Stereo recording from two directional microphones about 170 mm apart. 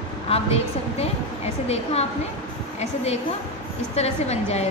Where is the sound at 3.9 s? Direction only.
40° left (ahead or behind).